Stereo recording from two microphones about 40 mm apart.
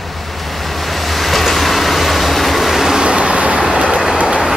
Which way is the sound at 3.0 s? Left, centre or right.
Right.